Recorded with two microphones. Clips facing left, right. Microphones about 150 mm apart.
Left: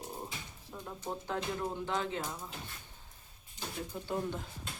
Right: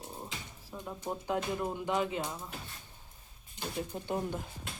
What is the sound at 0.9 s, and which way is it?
Speech, 15° right (ahead or behind).